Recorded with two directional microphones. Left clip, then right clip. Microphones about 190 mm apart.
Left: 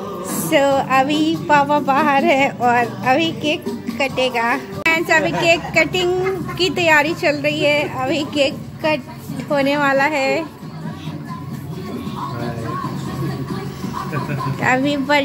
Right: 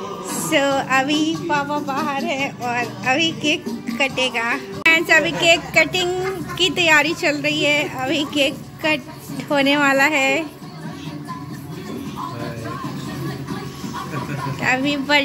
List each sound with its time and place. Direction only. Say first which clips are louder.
0.7 s a woman's voice: left 3 dB; centre (ahead or behind)
1.1 s speech: left 2 dB; 15° left (ahead or behind)
1.5 s music: left 11 dB; 40° left (ahead or behind)
2.8 s speech: left 3 dB; 15° left (ahead or behind)
4.8 s a woman's voice: right 1 dB; centre (ahead or behind)
14.6 s speech: left 2 dB; 15° left (ahead or behind)